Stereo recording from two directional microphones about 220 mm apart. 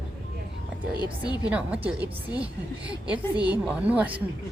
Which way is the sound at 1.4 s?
5° right (ahead or behind).